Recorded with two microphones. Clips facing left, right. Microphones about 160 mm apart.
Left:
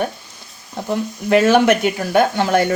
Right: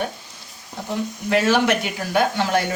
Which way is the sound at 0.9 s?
55° left (ahead or behind).